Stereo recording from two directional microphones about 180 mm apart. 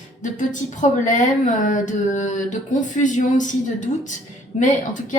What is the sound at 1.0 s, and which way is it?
A woman's voice, 45° left (ahead or behind).